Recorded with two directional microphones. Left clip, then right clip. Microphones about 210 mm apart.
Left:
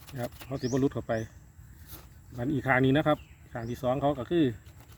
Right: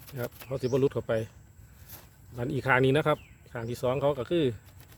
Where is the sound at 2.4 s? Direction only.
40° right (ahead or behind).